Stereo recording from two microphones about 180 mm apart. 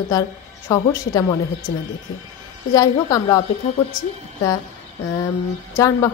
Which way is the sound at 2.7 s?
20° left (ahead or behind).